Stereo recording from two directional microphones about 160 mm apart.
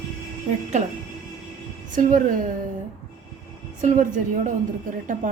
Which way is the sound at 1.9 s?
55° right (ahead or behind).